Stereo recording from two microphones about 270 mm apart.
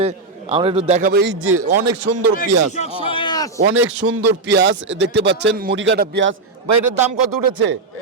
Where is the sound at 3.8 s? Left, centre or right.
Right.